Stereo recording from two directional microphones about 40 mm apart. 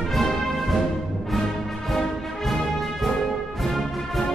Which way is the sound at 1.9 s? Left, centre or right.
Centre.